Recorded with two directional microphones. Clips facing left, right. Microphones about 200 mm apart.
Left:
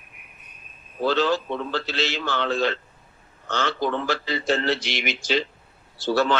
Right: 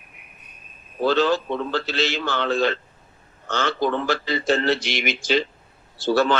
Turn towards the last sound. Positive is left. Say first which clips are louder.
# right 2 dB
turn(degrees=-50)  # may be behind; listen again after turning